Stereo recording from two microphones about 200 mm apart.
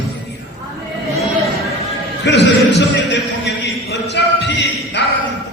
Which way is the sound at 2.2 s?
60° left (ahead or behind).